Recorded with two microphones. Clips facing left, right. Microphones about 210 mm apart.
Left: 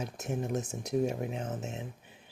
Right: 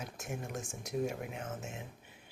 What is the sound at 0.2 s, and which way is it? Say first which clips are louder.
Speech: left 8 dB; 40° left (ahead or behind).